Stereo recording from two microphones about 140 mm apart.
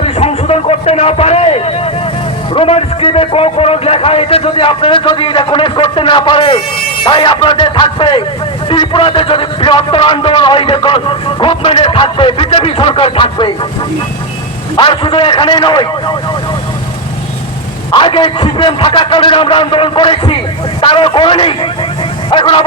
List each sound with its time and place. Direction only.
0.0 s a man's voice: 45° left (ahead or behind)
14.8 s a man's voice: 40° left (ahead or behind)
17.9 s a man's voice: 35° left (ahead or behind)